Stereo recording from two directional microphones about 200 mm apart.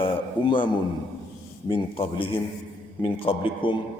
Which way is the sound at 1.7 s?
25° left (ahead or behind).